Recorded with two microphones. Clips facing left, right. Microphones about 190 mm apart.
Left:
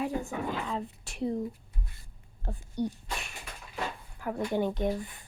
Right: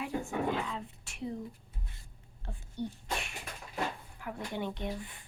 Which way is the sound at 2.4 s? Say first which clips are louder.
Left 6 dB; 40° left (ahead or behind).